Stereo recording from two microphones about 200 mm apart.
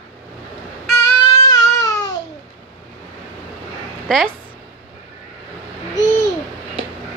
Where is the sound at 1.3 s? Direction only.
15° left (ahead or behind).